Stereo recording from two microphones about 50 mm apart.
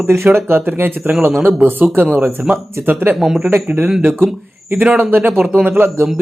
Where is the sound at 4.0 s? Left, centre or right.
Right.